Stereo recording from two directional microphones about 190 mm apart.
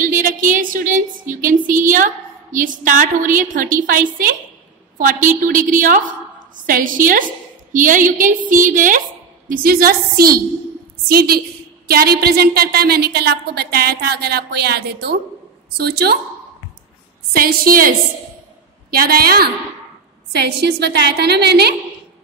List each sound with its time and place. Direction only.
0.0 s a woman's voice: 45° right (ahead or behind)
17.3 s a woman's voice: 50° right (ahead or behind)